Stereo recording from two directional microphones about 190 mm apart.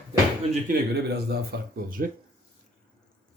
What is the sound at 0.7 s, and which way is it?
Speech, 55° right (ahead or behind).